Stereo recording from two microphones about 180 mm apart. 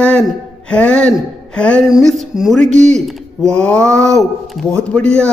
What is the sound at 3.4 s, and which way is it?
Speech, 5° left (ahead or behind).